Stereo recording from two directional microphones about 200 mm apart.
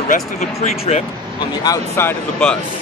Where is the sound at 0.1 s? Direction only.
35° left (ahead or behind).